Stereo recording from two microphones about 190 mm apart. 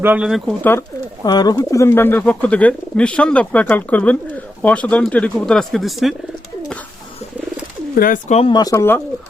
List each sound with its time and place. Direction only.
0.0 s speech: 5° right (ahead or behind)
0.6 s speech: 10° left (ahead or behind)
7.9 s speech: 45° left (ahead or behind)
8.4 s speech: 25° left (ahead or behind)